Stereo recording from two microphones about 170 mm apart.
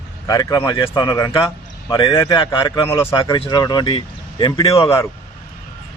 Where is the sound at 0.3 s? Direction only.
20° left (ahead or behind).